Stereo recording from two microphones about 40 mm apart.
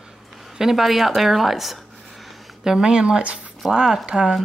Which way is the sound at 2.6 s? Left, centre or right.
Centre.